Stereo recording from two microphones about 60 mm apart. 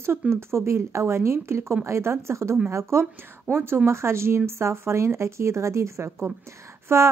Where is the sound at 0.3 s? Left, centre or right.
Right.